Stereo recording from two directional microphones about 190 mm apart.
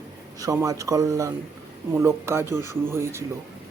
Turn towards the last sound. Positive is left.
turn(degrees=-15)  # may be behind; listen again after turning